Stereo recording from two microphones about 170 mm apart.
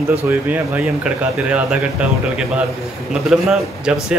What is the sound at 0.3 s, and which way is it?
Speech, 10° right (ahead or behind).